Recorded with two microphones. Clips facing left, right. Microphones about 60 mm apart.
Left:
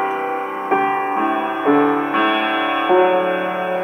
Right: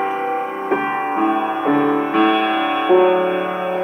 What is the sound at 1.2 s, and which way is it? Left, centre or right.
Music, centre.